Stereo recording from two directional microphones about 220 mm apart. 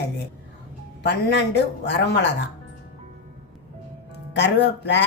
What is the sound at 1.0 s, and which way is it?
A woman's voice, 50° left (ahead or behind).